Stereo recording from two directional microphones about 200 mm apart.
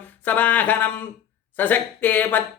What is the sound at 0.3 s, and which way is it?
Speech, 10° left (ahead or behind).